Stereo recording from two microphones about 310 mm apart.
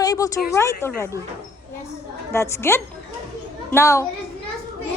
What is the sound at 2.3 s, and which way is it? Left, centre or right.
A woman's voice, centre.